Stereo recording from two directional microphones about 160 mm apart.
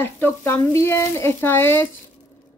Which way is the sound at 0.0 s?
15° left (ahead or behind).